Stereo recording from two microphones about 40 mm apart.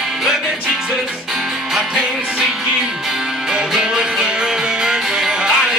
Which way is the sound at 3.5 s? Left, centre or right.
Centre.